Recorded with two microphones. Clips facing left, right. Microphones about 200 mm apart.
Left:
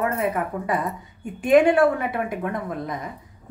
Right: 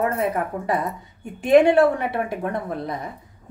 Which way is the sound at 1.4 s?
25° right (ahead or behind).